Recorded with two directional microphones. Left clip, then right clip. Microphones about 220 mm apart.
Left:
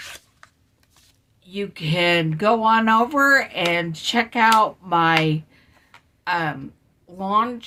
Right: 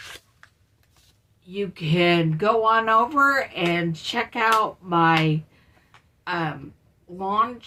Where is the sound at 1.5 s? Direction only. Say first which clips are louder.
Left 1 dB; 50° left (ahead or behind).